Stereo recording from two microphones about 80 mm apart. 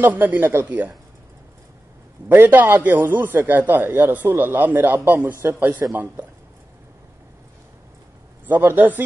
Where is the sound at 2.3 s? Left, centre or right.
Right.